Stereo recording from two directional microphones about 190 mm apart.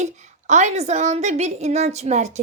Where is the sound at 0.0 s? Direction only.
40° right (ahead or behind).